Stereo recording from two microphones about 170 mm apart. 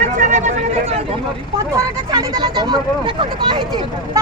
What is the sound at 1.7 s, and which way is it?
Speech, 25° right (ahead or behind).